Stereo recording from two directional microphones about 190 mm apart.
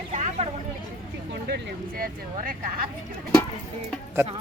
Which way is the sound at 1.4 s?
50° right (ahead or behind).